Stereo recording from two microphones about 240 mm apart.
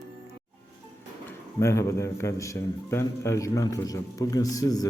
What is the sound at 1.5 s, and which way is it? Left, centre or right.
A man's voice, centre.